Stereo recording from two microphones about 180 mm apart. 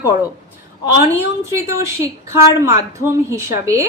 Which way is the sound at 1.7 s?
15° right (ahead or behind).